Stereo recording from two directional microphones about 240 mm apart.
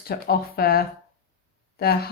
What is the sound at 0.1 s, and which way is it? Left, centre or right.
Speech, left.